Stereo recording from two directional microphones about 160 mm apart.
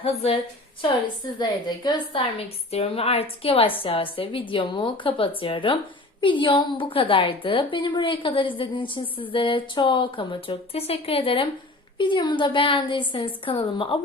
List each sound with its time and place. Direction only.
0.0 s a woman's voice: 40° left (ahead or behind)
1.4 s a woman's voice: 25° left (ahead or behind)
2.7 s a woman's voice: 35° left (ahead or behind)